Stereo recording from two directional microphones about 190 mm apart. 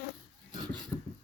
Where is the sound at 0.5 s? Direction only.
20° right (ahead or behind).